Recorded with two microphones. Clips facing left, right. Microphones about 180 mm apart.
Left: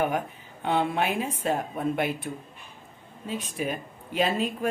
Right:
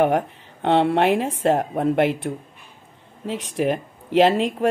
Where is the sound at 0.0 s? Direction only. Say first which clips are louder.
Right 8 dB; 75° right (ahead or behind).